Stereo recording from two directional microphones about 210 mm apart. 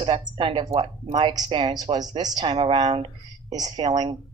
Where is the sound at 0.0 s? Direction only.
25° right (ahead or behind).